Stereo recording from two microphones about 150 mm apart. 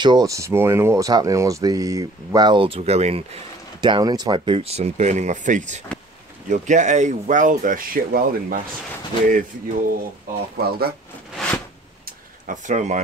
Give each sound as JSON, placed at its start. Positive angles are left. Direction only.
{"t": 0.0, "sound": "speech", "side_deg": -25}
{"t": 3.8, "sound": "speech", "side_deg": -30}
{"t": 9.3, "sound": "a sound", "side_deg": -70}
{"t": 10.6, "sound": "speech", "side_deg": -90}
{"t": 11.4, "sound": "a sound", "side_deg": 0}
{"t": 12.4, "sound": "speech", "side_deg": -55}